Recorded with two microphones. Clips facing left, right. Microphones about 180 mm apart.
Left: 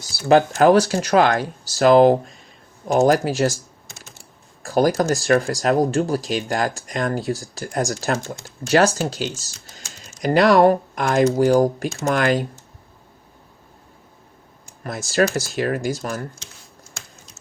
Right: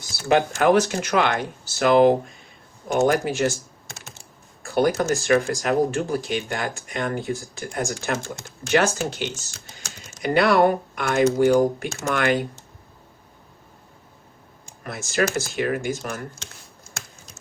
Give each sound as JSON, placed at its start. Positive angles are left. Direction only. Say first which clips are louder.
{"t": 0.3, "sound": "speech", "louder": "left 4 dB", "side_deg": 35}
{"t": 4.6, "sound": "speech", "louder": "left 3 dB", "side_deg": 35}
{"t": 14.8, "sound": "speech", "louder": "left 4 dB", "side_deg": 35}